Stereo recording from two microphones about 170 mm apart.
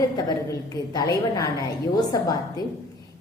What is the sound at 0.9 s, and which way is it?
Speech, 20° left (ahead or behind).